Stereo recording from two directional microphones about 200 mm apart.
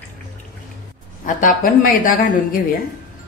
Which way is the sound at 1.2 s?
40° left (ahead or behind).